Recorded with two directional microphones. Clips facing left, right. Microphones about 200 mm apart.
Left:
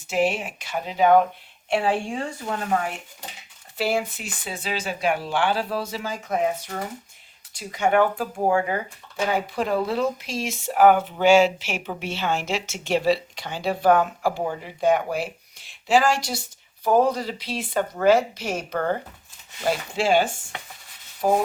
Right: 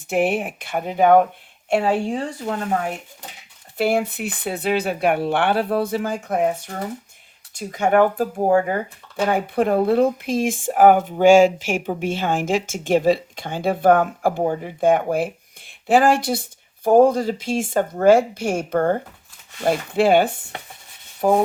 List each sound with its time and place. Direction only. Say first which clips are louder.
0.1 s speech: right 3 dB; 55° right (ahead or behind)
1.7 s a woman's voice: right 4 dB; 40° right (ahead or behind)
3.8 s speech: right 5 dB; 60° right (ahead or behind)
7.7 s speech: right 3 dB; 45° right (ahead or behind)
9.2 s speech: right 5 dB; 55° right (ahead or behind)
21.2 s rub: right 4 dB; 60° right (ahead or behind)